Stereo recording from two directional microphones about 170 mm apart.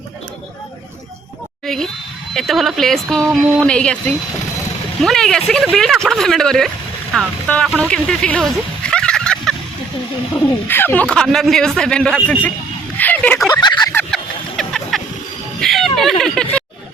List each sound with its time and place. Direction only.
1.6 s a sound: centre (ahead or behind)
2.3 s speech: centre (ahead or behind)
5.0 s speech: 5° left (ahead or behind)
10.7 s speech: 10° left (ahead or behind)
13.5 s a sound: 25° left (ahead or behind)
13.9 s vehicle: centre (ahead or behind)
15.6 s speech: centre (ahead or behind)